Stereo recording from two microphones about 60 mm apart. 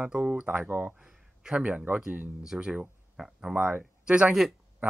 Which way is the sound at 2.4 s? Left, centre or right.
Centre.